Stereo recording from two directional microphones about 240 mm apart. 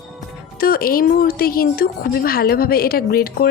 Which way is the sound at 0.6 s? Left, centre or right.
Left.